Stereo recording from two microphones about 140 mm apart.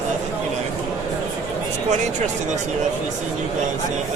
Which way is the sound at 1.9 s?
60° right (ahead or behind).